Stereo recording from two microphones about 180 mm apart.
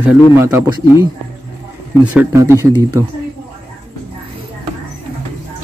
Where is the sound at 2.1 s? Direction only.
15° right (ahead or behind).